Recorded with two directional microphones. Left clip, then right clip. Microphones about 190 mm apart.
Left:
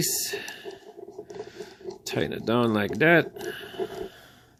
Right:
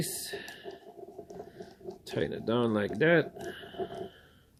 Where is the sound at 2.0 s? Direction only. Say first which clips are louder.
Left 4 dB; 40° left (ahead or behind).